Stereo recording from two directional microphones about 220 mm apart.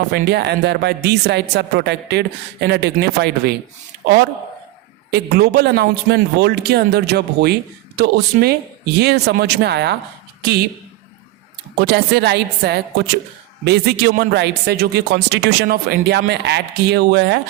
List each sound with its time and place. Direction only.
0.1 s a man's voice: 50° right (ahead or behind)
11.8 s a man's voice: 45° right (ahead or behind)